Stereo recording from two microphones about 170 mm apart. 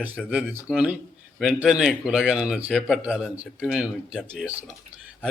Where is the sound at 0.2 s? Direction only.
5° right (ahead or behind).